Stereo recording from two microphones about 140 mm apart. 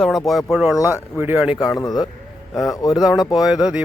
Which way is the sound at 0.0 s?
Centre (ahead or behind).